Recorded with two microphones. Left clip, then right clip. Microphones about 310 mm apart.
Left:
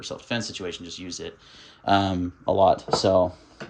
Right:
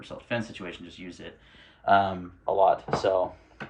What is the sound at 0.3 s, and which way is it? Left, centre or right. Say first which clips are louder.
Speech: left 2 dB; centre.